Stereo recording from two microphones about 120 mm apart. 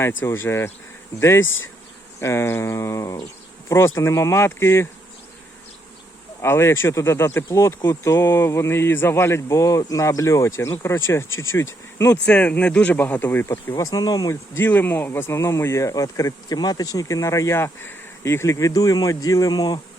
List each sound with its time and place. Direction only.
0.0 s speech: 20° left (ahead or behind)
6.4 s speech: 20° left (ahead or behind)
12.2 s speech: 10° left (ahead or behind); by 19.8 s 35° left (ahead or behind)